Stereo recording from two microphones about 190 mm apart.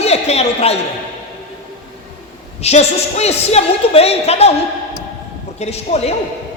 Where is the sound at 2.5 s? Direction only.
35° left (ahead or behind).